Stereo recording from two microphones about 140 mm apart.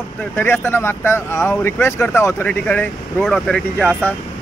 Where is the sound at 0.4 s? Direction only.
15° left (ahead or behind).